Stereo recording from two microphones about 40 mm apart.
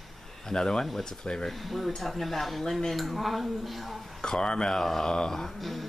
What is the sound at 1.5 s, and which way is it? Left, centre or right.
Speech, centre.